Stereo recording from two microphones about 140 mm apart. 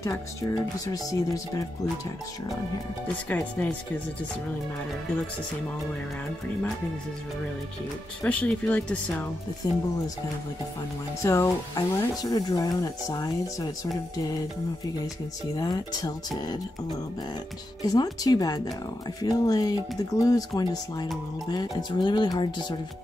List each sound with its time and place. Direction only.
0.0 s speech: 25° left (ahead or behind)
3.3 s speech: 10° left (ahead or behind)
8.2 s speech: 10° left (ahead or behind)
9.6 s speech: 25° left (ahead or behind)
11.2 s speech: 20° left (ahead or behind)
15.5 s speech: 30° left (ahead or behind)
17.8 s speech: 30° left (ahead or behind)